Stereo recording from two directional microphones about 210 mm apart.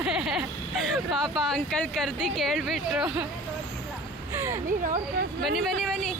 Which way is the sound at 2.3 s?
Centre (ahead or behind).